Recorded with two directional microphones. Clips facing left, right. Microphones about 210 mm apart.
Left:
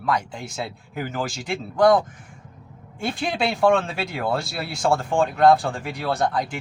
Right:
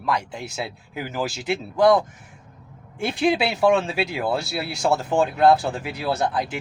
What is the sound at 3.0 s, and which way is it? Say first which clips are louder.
Speech: right 4 dB; 5° right (ahead or behind).